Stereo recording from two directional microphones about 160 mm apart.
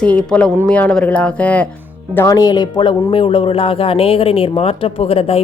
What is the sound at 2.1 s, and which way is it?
Speech, 20° left (ahead or behind).